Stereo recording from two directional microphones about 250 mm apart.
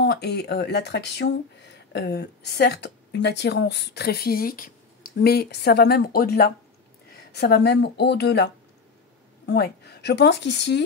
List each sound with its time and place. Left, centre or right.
0.0 s speech: left
9.5 s a woman's voice: left